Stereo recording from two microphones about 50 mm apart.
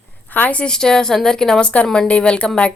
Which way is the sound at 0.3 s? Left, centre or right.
Left.